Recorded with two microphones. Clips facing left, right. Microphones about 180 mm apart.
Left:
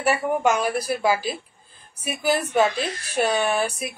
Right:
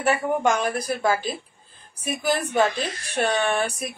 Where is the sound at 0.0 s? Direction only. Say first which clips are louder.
Even; 5° left (ahead or behind).